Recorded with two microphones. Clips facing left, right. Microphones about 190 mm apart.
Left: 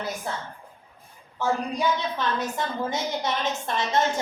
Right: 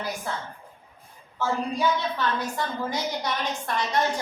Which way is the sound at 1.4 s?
20° left (ahead or behind).